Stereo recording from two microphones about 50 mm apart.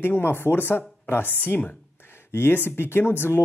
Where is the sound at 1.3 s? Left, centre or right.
Left.